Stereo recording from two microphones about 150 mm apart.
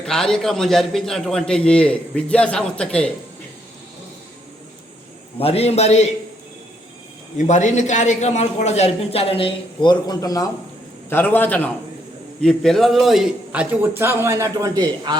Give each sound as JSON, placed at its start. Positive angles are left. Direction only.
{"t": 0.0, "sound": "a man's voice", "side_deg": 5}
{"t": 5.4, "sound": "a man's voice", "side_deg": 40}
{"t": 7.3, "sound": "a man's voice", "side_deg": 55}
{"t": 11.1, "sound": "a man's voice", "side_deg": 15}